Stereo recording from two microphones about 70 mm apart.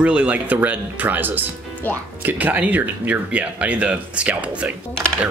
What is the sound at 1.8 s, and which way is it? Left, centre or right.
Speech, left.